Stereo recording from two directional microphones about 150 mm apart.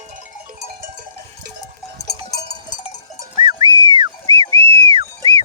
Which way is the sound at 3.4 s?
30° right (ahead or behind).